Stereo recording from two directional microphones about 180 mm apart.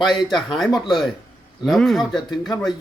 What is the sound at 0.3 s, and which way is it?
Speech, centre (ahead or behind).